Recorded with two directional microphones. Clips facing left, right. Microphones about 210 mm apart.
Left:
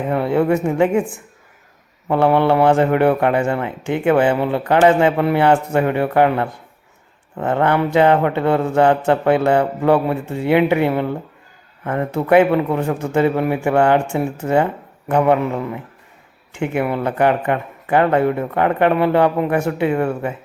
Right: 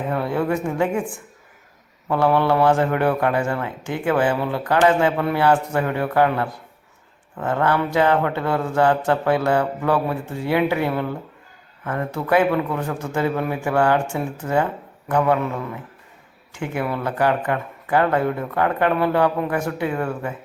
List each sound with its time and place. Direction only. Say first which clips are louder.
0.1 s speech: left 6 dB; 25° left (ahead or behind)
2.2 s speech: left 3 dB; 20° left (ahead or behind)